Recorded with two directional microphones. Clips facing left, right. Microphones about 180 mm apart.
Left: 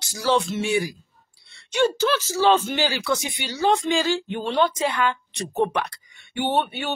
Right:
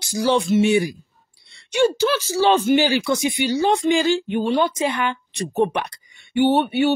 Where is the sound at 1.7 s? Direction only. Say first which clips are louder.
Right 3 dB; 10° right (ahead or behind).